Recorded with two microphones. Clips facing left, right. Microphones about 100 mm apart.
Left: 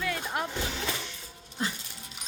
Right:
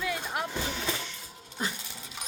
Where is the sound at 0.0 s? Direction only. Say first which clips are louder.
Left 1 dB; 10° right (ahead or behind).